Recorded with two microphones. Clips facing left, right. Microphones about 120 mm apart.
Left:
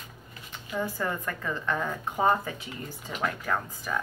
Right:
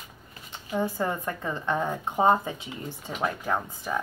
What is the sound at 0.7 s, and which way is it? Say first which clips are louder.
A woman's voice: right 3 dB; 25° right (ahead or behind).